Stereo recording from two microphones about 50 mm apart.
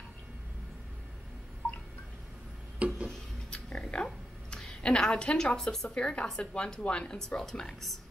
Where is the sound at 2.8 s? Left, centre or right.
Right.